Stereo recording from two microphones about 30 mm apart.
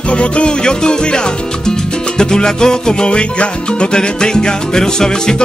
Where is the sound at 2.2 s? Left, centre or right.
Left.